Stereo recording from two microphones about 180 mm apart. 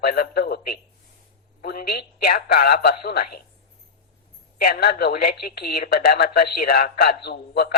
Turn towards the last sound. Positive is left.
turn(degrees=60)  # may be behind; listen again after turning